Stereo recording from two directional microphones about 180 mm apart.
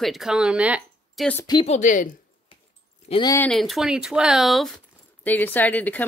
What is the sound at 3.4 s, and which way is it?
Speech, 5° left (ahead or behind).